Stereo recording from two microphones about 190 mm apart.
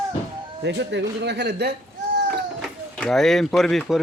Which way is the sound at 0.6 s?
60° right (ahead or behind).